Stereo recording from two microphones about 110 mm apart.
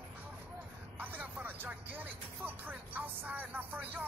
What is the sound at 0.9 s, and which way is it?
Speech, 15° right (ahead or behind).